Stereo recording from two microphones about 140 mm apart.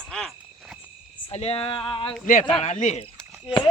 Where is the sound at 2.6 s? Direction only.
55° left (ahead or behind).